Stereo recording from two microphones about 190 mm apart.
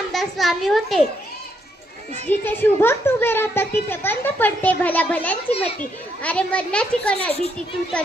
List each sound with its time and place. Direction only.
0.1 s a child's voice: centre (ahead or behind)
2.4 s a child's voice: 10° left (ahead or behind)
5.5 s a child's voice: 30° left (ahead or behind)
6.2 s a child's voice: 5° left (ahead or behind)